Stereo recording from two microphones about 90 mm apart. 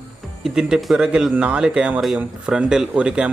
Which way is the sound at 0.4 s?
5° right (ahead or behind).